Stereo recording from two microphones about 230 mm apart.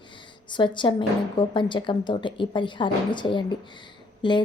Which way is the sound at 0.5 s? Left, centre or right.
Centre.